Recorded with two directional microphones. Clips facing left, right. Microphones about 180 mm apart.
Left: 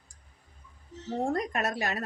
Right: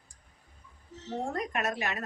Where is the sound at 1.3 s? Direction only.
35° left (ahead or behind).